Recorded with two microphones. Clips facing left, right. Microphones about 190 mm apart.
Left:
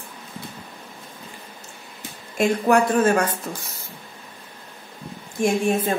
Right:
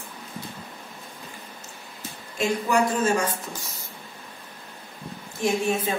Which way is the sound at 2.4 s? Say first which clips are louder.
Left 5 dB; 60° left (ahead or behind).